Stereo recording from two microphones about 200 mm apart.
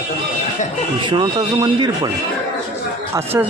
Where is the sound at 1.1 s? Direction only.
20° right (ahead or behind).